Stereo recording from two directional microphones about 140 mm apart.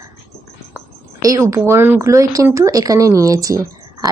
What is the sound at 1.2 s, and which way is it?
Speech, 25° right (ahead or behind).